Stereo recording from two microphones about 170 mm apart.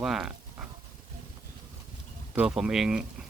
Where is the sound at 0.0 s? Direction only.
5° right (ahead or behind).